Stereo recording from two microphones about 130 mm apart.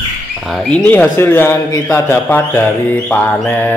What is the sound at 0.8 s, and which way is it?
Speech, 15° left (ahead or behind).